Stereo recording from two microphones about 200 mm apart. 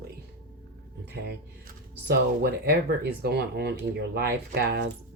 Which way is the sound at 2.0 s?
50° right (ahead or behind).